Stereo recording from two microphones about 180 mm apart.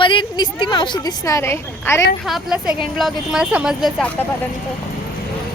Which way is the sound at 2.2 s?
5° right (ahead or behind).